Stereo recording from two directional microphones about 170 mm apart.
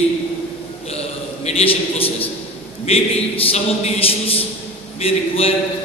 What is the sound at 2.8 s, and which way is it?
A man's voice, 35° left (ahead or behind).